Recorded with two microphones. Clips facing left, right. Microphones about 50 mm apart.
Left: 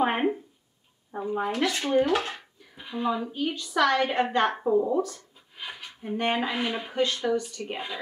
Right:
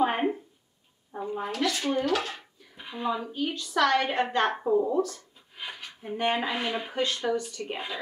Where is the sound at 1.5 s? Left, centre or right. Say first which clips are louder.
Left 2 dB; left.